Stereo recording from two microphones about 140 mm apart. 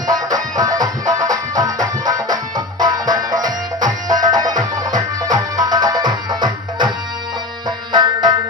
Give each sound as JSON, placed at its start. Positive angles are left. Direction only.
{"t": 0.1, "sound": "music", "side_deg": -30}
{"t": 7.9, "sound": "music", "side_deg": -30}